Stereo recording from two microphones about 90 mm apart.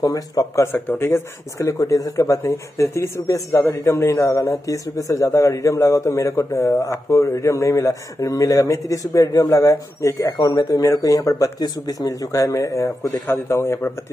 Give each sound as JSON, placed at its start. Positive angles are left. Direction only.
{"t": 0.0, "sound": "a man's voice", "side_deg": 40}
{"t": 0.7, "sound": "a man's voice", "side_deg": 20}